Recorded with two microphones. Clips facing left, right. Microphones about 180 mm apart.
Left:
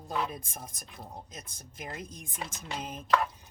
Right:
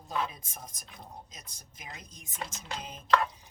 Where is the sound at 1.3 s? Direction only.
55° left (ahead or behind).